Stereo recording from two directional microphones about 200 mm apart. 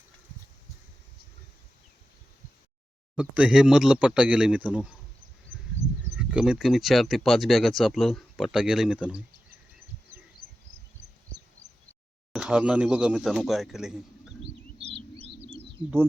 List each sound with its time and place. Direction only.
3.2 s speech: 5° right (ahead or behind)
6.1 s speech: 5° right (ahead or behind)
12.3 s speech: 5° right (ahead or behind)
14.9 s a sound: 25° right (ahead or behind)